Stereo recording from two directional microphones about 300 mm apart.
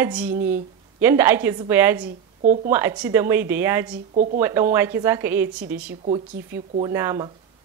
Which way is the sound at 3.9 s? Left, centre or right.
Right.